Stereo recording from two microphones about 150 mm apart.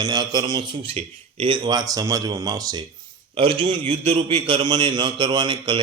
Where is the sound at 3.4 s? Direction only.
35° right (ahead or behind).